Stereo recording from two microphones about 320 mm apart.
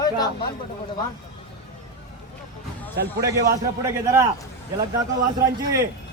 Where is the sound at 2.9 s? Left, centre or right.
Right.